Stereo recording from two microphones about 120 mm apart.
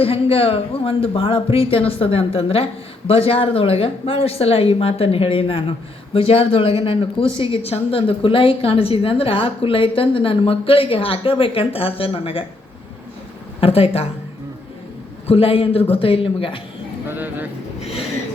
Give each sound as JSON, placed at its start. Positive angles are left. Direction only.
{"t": 0.0, "sound": "speech", "side_deg": 55}
{"t": 13.6, "sound": "speech", "side_deg": 55}
{"t": 15.3, "sound": "speech", "side_deg": 50}
{"t": 17.1, "sound": "speech", "side_deg": -15}
{"t": 17.7, "sound": "a sound", "side_deg": 60}